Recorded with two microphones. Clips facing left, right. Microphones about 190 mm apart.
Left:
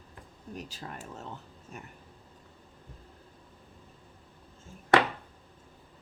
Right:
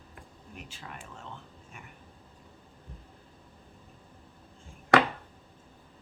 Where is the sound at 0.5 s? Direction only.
40° left (ahead or behind).